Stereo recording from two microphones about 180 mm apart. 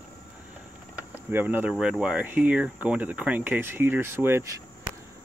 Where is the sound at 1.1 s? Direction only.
10° right (ahead or behind).